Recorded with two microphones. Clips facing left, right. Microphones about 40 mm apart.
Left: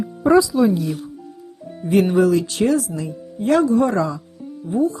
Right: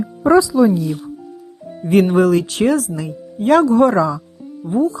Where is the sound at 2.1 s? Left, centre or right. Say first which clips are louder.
Right 2 dB; right.